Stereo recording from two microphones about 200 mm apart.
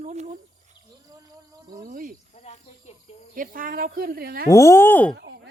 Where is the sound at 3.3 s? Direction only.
45° right (ahead or behind).